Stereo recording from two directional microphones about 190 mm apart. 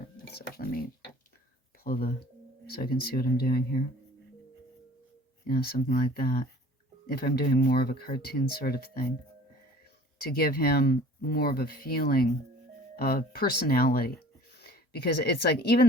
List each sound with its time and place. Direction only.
0.3 s dishes: 55° left (ahead or behind)
1.8 s speech: 50° left (ahead or behind)
5.5 s speech: 55° left (ahead or behind)
10.2 s speech: 55° left (ahead or behind)